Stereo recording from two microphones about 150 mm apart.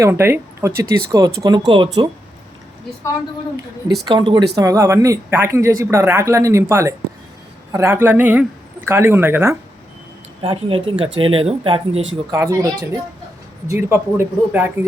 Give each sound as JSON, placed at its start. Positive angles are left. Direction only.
{"t": 0.0, "sound": "speech", "side_deg": -15}
{"t": 4.0, "sound": "speech", "side_deg": -30}
{"t": 10.4, "sound": "speech", "side_deg": -35}
{"t": 12.3, "sound": "speech", "side_deg": -20}